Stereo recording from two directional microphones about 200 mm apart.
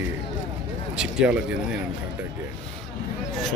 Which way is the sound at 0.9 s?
5° right (ahead or behind).